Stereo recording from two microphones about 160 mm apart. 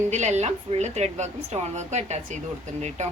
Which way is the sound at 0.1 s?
45° right (ahead or behind).